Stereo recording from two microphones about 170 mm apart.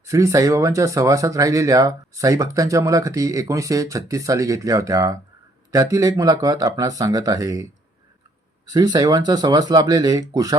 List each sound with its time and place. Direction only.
0.0 s speech: 20° right (ahead or behind)
8.7 s speech: 25° right (ahead or behind)